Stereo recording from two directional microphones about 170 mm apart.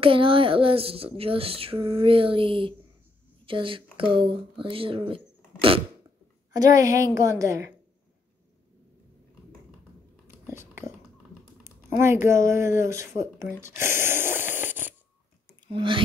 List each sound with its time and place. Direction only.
0.0 s speech: 30° right (ahead or behind)
6.5 s a woman's voice: 20° right (ahead or behind)
10.5 s dog: 15° right (ahead or behind)
11.6 s speech: 15° right (ahead or behind)
15.6 s speech: 30° right (ahead or behind)